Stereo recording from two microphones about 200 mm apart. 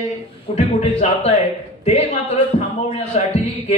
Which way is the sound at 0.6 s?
30° left (ahead or behind).